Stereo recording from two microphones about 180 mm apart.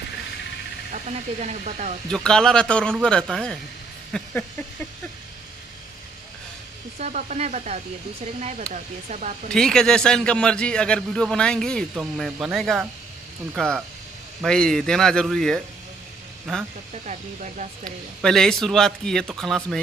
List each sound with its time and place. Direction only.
0.9 s speech: 40° right (ahead or behind)
2.0 s a man's voice: 5° left (ahead or behind)
4.1 s a sound: 5° left (ahead or behind)
7.0 s speech: 40° right (ahead or behind)
9.5 s a man's voice: 5° left (ahead or behind)
17.0 s speech: 40° right (ahead or behind)
17.8 s a man's voice: 5° left (ahead or behind)